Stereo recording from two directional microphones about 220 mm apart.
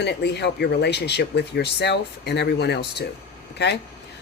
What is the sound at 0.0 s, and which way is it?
Speech, 50° left (ahead or behind).